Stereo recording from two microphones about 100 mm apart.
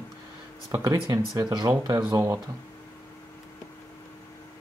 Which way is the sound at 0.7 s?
30° right (ahead or behind).